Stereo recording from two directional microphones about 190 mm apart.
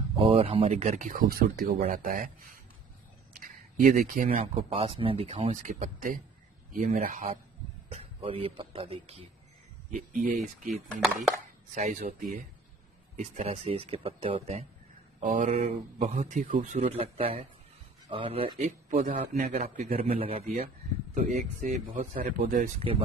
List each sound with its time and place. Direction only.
0.2 s speech: 30° right (ahead or behind); by 2.6 s 45° right (ahead or behind)
3.3 s a sound: 45° right (ahead or behind)
4.1 s speech: 45° right (ahead or behind)
4.4 s speech: 30° right (ahead or behind)
7.9 s speech: 30° right (ahead or behind)
9.8 s speech: 45° right (ahead or behind)
13.2 s speech: 40° right (ahead or behind)
15.1 s speech: 45° right (ahead or behind)
18.9 s speech: 40° right (ahead or behind)
20.6 s speech: 45° right (ahead or behind)